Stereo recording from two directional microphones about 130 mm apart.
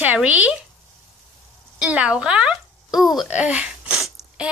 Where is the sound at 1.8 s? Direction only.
10° right (ahead or behind).